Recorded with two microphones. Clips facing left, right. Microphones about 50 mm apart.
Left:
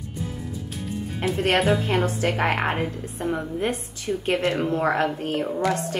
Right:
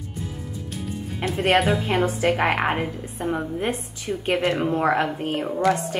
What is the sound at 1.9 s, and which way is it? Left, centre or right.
A woman's voice, right.